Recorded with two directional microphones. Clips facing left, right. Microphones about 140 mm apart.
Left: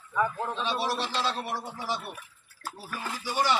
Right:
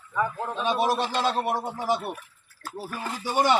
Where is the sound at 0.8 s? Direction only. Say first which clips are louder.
Right 5 dB; 50° right (ahead or behind).